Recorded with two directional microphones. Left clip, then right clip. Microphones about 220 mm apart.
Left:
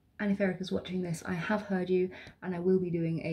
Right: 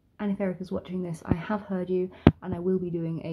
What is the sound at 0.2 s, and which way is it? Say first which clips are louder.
Speech: right 1 dB; 5° left (ahead or behind).